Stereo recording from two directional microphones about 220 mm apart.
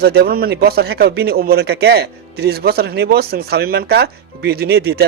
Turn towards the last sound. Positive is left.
turn(degrees=-45)  # may be behind; listen again after turning